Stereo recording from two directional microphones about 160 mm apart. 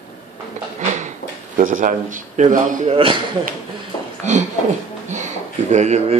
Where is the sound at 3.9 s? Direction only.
30° left (ahead or behind).